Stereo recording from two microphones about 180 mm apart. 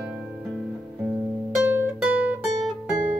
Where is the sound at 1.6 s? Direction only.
10° right (ahead or behind).